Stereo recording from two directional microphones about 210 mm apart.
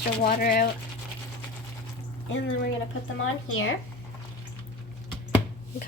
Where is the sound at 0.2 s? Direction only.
40° left (ahead or behind).